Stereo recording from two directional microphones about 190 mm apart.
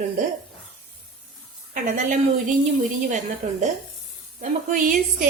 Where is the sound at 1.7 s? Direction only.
45° right (ahead or behind).